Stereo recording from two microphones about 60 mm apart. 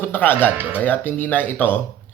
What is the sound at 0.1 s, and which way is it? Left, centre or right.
Speech, left.